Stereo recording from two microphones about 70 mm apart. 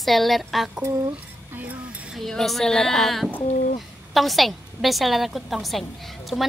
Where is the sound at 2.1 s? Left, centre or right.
Centre.